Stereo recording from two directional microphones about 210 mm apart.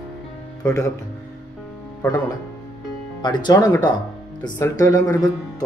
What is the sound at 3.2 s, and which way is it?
Speech, 20° left (ahead or behind).